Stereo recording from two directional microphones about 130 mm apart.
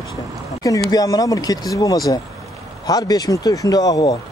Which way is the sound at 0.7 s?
30° left (ahead or behind).